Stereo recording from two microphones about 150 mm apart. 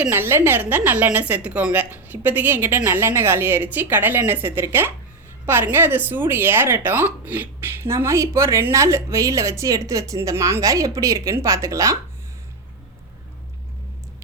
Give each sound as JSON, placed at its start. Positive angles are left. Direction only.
{"t": 0.0, "sound": "a woman's voice", "side_deg": -15}